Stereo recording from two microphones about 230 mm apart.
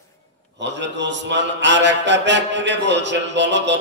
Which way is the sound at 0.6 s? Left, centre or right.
Right.